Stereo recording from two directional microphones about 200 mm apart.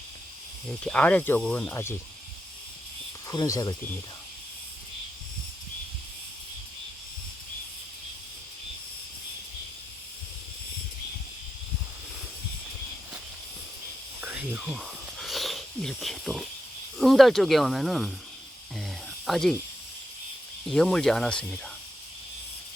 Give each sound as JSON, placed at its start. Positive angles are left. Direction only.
{"t": 0.9, "sound": "speech", "side_deg": 5}
{"t": 3.2, "sound": "speech", "side_deg": 15}
{"t": 14.2, "sound": "wheeze", "side_deg": -5}
{"t": 17.0, "sound": "speech", "side_deg": 0}
{"t": 18.8, "sound": "snake", "side_deg": 0}
{"t": 20.7, "sound": "speech", "side_deg": 5}